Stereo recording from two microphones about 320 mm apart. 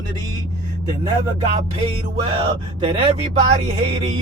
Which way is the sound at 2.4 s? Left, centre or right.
Centre.